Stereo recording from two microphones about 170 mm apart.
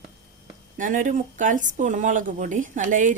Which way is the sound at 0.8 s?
50° right (ahead or behind).